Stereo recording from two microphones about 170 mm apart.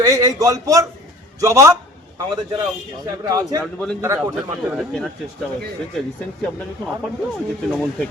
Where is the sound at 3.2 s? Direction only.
20° right (ahead or behind).